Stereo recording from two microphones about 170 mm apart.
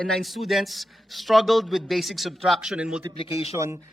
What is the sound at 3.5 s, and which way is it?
Speech, 15° right (ahead or behind).